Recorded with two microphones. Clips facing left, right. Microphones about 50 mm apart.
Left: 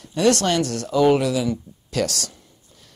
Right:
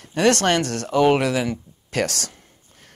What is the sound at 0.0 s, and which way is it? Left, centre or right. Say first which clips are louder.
Speech: even; right.